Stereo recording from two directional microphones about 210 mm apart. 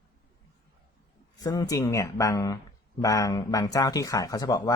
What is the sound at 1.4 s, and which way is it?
Speech, 20° left (ahead or behind).